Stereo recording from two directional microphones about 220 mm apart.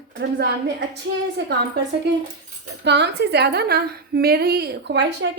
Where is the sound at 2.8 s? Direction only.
50° right (ahead or behind).